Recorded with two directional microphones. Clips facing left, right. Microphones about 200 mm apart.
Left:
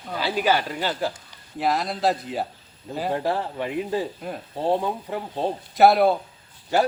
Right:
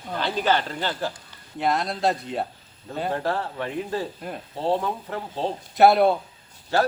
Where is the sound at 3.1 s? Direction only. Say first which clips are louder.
Left 1 dB; 15° left (ahead or behind).